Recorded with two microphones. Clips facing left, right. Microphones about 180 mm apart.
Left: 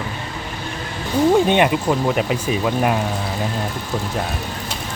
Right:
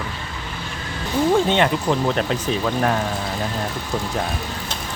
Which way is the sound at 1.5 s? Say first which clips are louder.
Left 2 dB; 15° left (ahead or behind).